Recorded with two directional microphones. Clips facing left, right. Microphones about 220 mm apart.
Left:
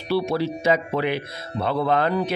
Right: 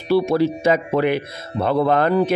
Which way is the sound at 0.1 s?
50° right (ahead or behind).